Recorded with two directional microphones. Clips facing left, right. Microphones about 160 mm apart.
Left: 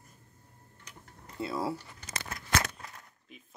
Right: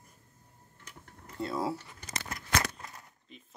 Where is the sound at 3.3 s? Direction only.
5° left (ahead or behind).